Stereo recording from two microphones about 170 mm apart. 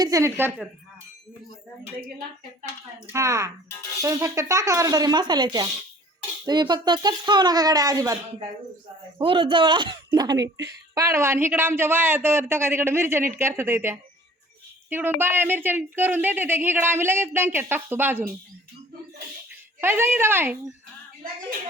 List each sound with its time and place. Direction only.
0.0 s speech: 20° right (ahead or behind)
3.1 s speech: 15° right (ahead or behind)
19.8 s speech: 15° right (ahead or behind)